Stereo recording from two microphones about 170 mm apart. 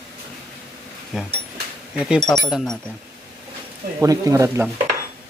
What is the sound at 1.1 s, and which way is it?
Speech, 5° right (ahead or behind).